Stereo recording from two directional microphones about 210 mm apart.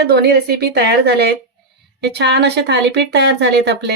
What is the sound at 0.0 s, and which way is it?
A woman's voice, 50° right (ahead or behind).